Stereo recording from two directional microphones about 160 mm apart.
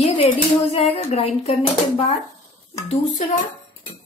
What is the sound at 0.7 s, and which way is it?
A woman's voice, 40° left (ahead or behind).